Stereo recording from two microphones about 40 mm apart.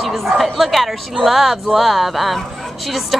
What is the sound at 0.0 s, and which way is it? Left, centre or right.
Speech, centre.